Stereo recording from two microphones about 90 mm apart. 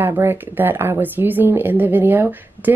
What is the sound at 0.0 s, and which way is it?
Speech, 25° right (ahead or behind).